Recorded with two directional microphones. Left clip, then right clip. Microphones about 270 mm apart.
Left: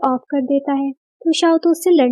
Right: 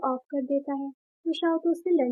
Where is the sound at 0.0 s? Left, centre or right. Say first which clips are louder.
Left 10 dB; left.